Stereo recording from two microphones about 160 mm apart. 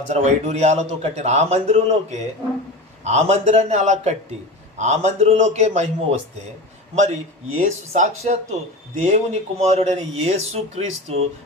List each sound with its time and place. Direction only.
0.1 s speech: 45° right (ahead or behind)
7.6 s speech: 45° right (ahead or behind)